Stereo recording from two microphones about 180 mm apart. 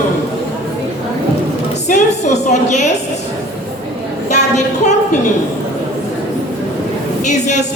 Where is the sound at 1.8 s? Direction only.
40° left (ahead or behind).